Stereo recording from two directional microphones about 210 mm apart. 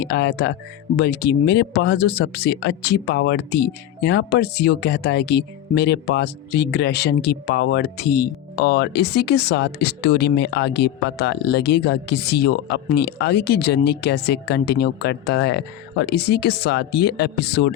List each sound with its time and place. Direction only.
0.0 s speech: 50° left (ahead or behind)